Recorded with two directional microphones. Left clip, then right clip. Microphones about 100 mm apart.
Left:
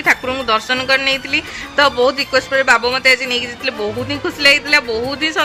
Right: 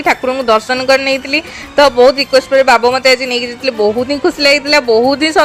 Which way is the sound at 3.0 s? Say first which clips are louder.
Right 3 dB; 55° right (ahead or behind).